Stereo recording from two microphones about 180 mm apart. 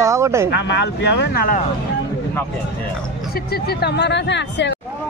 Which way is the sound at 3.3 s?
60° left (ahead or behind).